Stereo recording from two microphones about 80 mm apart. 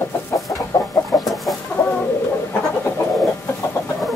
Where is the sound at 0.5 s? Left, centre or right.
Left.